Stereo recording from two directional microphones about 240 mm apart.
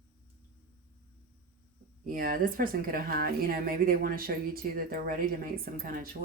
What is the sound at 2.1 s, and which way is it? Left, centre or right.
Speech, right.